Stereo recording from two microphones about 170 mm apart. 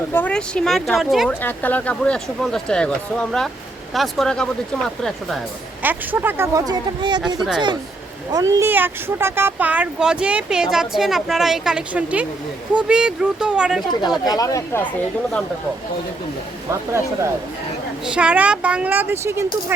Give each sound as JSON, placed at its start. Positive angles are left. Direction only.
{"t": 0.1, "sound": "speech", "side_deg": 10}
{"t": 1.3, "sound": "speech", "side_deg": 10}
{"t": 5.8, "sound": "speech", "side_deg": -10}
{"t": 7.3, "sound": "speech", "side_deg": 0}
{"t": 8.3, "sound": "speech", "side_deg": -20}
{"t": 14.0, "sound": "speech", "side_deg": 25}
{"t": 18.0, "sound": "speech", "side_deg": -5}